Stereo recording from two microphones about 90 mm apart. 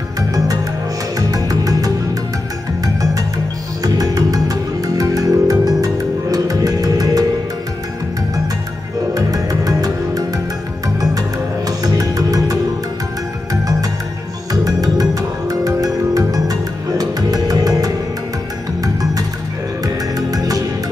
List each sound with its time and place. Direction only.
1.1 s music: 45° right (ahead or behind)
9.1 s music: 45° right (ahead or behind)
19.8 s music: 45° right (ahead or behind)